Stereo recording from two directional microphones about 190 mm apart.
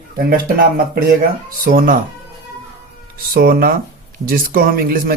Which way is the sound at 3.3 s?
55° right (ahead or behind).